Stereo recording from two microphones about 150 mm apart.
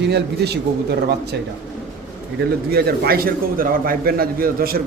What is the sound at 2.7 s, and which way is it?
A man's voice, 90° right.